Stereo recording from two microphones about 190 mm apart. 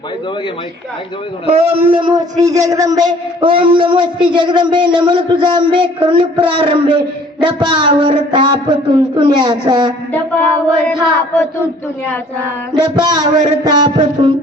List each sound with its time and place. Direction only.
1.5 s a man's voice: 30° right (ahead or behind)
10.1 s a sound: 10° left (ahead or behind)
12.7 s a man's voice: 20° right (ahead or behind)